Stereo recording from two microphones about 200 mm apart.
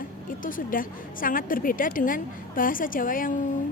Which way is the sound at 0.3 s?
45° left (ahead or behind).